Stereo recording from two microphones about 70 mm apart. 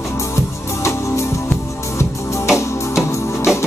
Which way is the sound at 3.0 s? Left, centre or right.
Left.